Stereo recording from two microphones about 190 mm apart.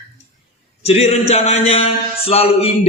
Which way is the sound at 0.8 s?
35° left (ahead or behind).